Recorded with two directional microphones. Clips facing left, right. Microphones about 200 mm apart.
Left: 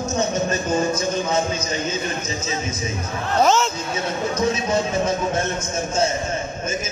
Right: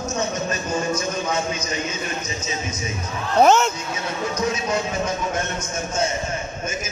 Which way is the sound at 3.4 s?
60° right (ahead or behind).